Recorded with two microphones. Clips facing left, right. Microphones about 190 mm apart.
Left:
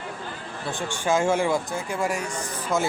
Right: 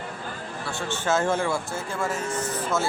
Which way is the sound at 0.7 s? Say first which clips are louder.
Left 1 dB; 15° left (ahead or behind).